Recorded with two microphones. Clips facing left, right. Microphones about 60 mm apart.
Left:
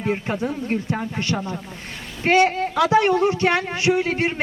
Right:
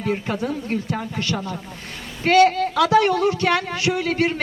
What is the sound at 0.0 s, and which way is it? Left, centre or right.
Speech, left.